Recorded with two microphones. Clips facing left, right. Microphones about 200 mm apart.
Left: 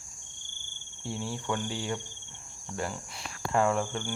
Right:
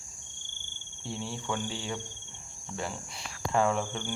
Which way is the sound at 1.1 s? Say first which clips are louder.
Left 2 dB; 5° left (ahead or behind).